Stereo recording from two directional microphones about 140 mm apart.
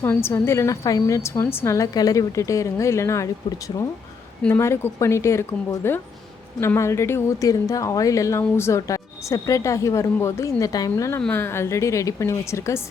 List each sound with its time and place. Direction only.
0.0 s a woman's voice: 15° left (ahead or behind)
4.4 s a woman's voice: 15° left (ahead or behind)